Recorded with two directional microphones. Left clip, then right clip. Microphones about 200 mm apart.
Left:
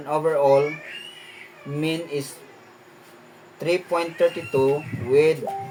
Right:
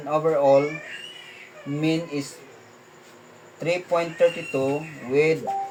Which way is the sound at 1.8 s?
60° left (ahead or behind).